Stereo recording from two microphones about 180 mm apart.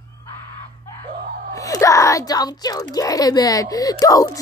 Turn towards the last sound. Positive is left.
turn(degrees=20)  # may be behind; listen again after turning